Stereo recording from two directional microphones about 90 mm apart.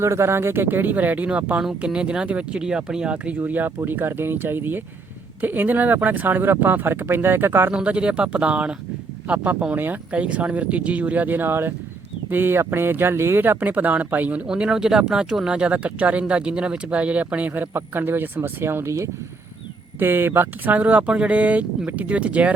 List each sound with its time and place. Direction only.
0.0 s speech: 30° right (ahead or behind)
7.7 s speech: 10° right (ahead or behind)